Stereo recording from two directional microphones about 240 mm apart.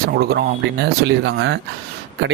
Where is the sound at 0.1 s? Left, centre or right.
Right.